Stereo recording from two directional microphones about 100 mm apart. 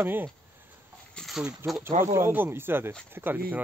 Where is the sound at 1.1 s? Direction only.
5° left (ahead or behind).